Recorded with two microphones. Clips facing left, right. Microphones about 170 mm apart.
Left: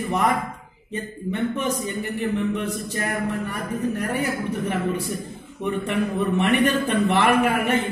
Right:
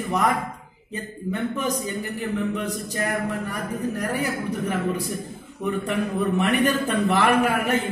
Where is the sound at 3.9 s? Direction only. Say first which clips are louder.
Left 1 dB; 40° right (ahead or behind).